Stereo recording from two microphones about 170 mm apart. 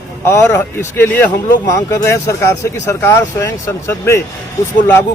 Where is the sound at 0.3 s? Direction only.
15° left (ahead or behind).